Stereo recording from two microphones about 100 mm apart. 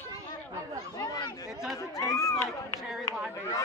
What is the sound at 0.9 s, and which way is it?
Chatter, 40° left (ahead or behind).